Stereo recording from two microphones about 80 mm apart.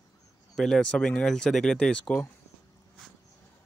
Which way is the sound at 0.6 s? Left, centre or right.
Centre.